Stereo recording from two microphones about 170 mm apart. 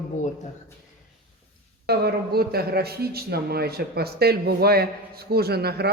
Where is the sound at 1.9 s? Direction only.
70° right (ahead or behind).